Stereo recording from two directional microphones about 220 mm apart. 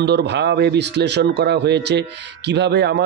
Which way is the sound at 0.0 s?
50° right (ahead or behind).